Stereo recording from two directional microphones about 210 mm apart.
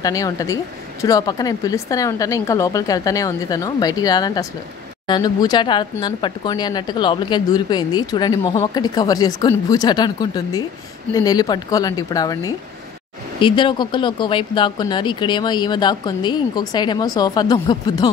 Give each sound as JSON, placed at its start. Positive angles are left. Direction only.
{"t": 0.0, "sound": "speech", "side_deg": 15}